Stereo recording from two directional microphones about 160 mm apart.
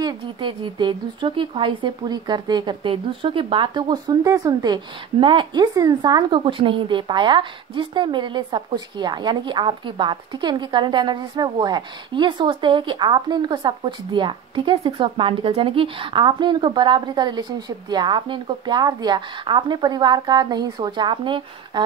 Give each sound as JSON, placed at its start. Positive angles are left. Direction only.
{"t": 0.0, "sound": "speech", "side_deg": -30}